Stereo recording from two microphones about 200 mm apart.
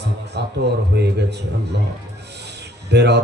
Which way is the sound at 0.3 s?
55° right (ahead or behind).